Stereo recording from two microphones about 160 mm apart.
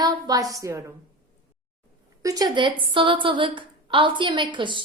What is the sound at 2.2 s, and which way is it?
A woman's voice, 20° right (ahead or behind).